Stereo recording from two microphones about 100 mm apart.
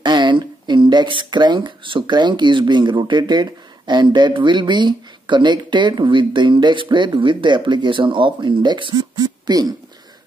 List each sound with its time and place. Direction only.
0.0 s speech: 50° right (ahead or behind)